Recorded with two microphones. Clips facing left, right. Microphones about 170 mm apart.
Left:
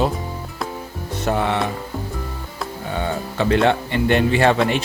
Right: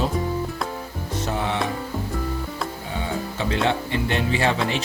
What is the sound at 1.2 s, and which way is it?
Music, 60° left (ahead or behind).